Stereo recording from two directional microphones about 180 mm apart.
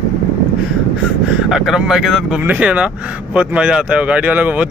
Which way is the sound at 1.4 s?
Centre (ahead or behind).